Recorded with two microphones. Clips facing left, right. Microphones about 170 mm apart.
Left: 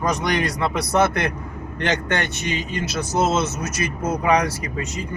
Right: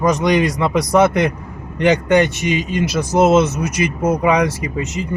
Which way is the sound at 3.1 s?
60° right (ahead or behind).